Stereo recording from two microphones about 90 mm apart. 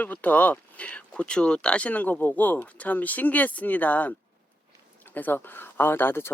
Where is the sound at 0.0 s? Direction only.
20° left (ahead or behind).